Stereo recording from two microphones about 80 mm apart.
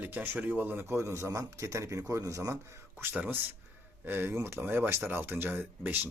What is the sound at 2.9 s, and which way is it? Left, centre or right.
A man's voice, right.